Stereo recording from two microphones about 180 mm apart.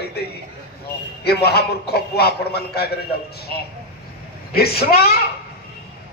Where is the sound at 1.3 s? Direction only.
60° left (ahead or behind).